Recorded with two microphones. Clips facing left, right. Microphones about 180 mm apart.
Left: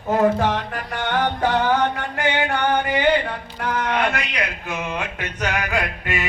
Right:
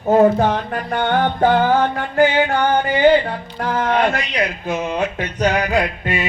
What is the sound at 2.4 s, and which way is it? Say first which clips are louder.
Mantra: right 3 dB; 35° right (ahead or behind).